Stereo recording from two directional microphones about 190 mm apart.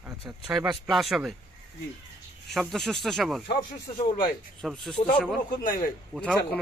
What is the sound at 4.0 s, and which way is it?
Speech, 45° left (ahead or behind).